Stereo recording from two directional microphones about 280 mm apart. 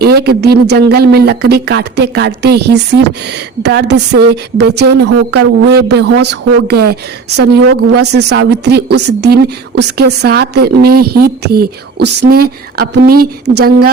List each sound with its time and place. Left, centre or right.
0.0 s speech: right